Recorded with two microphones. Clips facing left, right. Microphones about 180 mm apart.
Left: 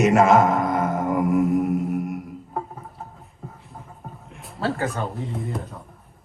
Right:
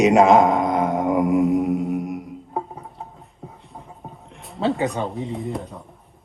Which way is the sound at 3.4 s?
Centre (ahead or behind).